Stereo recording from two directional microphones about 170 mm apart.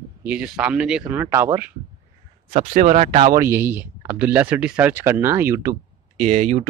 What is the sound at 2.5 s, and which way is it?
Speech, 50° right (ahead or behind).